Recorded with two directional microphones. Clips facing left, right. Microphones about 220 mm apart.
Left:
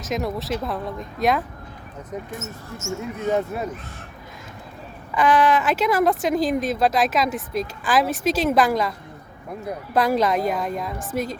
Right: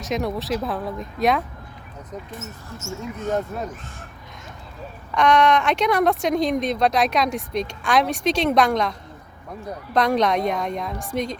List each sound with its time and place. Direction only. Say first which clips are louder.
0.0 s speech: right 1 dB; centre (ahead or behind)
2.3 s speech: left 2 dB; 50° left (ahead or behind)
3.3 s speech: left 1 dB; 10° left (ahead or behind)
5.1 s speech: right 1 dB; 5° left (ahead or behind)